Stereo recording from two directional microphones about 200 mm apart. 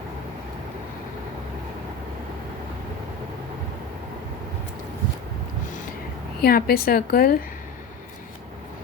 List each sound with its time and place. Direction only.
6.4 s a woman's voice: 50° left (ahead or behind)